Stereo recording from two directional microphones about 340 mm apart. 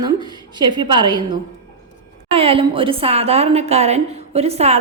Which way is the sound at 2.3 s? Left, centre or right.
Centre.